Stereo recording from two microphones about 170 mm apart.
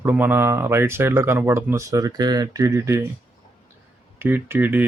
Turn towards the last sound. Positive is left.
turn(degrees=-10)  # may be behind; listen again after turning